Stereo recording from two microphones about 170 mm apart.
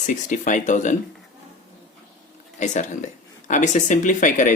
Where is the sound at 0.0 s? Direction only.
45° left (ahead or behind).